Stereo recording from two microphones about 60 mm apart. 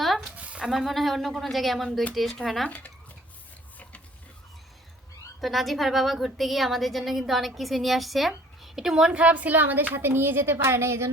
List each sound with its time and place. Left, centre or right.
0.0 s a sound: centre
0.3 s a sound: right
0.6 s a woman's voice: centre
2.6 s speech: left
5.4 s a woman's voice: centre
9.1 s a woman's voice: right